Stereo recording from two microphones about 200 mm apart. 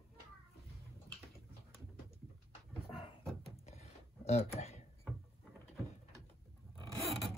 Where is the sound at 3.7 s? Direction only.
35° left (ahead or behind).